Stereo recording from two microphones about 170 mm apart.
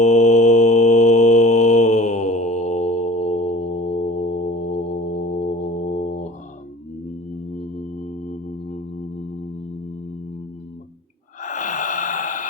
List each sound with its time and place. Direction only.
0.0 s mantra: 45° left (ahead or behind)
7.5 s mantra: 45° left (ahead or behind)
11.4 s sigh: 45° left (ahead or behind)